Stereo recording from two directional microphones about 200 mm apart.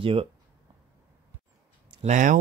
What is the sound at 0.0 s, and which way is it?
Speech, 25° right (ahead or behind).